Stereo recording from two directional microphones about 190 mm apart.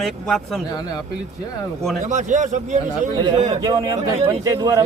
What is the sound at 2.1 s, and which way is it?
A man's voice, 40° right (ahead or behind).